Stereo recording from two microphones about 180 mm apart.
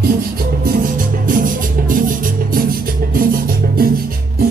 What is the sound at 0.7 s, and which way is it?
Music, 50° right (ahead or behind).